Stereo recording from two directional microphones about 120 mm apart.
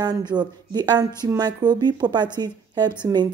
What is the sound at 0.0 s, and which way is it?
Speech, 35° right (ahead or behind).